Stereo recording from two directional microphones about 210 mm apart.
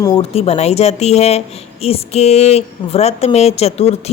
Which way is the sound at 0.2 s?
30° left (ahead or behind).